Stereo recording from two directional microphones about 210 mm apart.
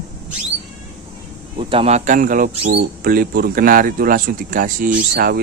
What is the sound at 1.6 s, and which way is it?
Speech, 25° right (ahead or behind).